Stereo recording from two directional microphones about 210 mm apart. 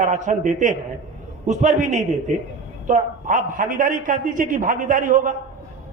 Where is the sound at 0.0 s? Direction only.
35° right (ahead or behind).